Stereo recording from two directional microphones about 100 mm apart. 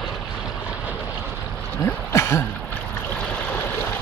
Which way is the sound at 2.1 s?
30° left (ahead or behind).